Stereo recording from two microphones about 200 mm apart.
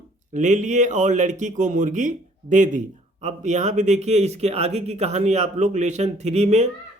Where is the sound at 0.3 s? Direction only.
35° right (ahead or behind).